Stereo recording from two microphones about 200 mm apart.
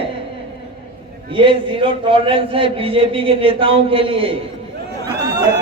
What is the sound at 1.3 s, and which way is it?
A man's voice, 25° right (ahead or behind).